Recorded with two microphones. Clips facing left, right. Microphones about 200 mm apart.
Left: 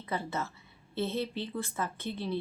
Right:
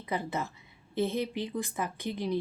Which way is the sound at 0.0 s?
15° right (ahead or behind).